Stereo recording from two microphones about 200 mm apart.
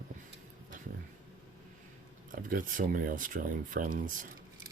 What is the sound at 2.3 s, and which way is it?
Speech, 45° right (ahead or behind).